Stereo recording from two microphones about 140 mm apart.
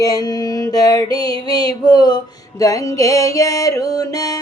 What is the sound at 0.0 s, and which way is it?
Music, 25° left (ahead or behind).